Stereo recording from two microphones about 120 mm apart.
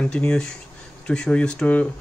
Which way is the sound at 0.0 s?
10° left (ahead or behind).